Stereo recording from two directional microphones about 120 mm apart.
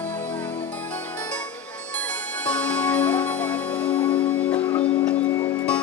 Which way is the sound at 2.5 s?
10° left (ahead or behind).